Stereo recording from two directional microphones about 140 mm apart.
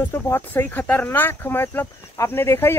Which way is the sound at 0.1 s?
15° left (ahead or behind).